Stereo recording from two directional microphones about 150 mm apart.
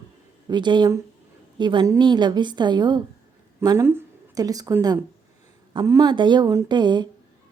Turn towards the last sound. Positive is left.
turn(degrees=-30)  # may be behind; listen again after turning